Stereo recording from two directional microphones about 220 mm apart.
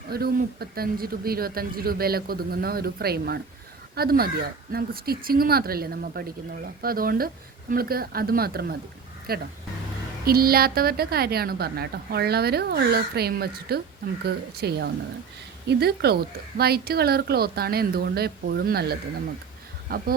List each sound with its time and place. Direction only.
0.1 s a woman's voice: 45° right (ahead or behind)